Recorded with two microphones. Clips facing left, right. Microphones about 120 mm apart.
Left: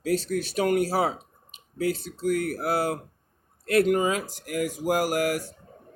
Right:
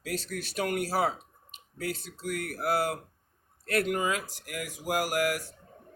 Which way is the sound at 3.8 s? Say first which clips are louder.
Left 7 dB; 30° left (ahead or behind).